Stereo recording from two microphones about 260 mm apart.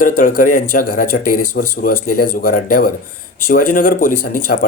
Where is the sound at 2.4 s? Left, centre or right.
Left.